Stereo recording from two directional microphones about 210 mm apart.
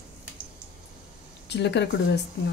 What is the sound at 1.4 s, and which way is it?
Speech, 55° left (ahead or behind).